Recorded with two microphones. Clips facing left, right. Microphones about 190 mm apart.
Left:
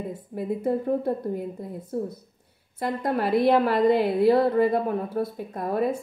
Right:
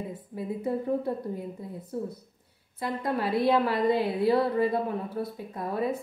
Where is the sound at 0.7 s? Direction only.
45° left (ahead or behind).